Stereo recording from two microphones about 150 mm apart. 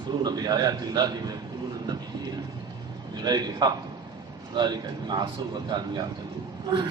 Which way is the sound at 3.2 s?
25° right (ahead or behind).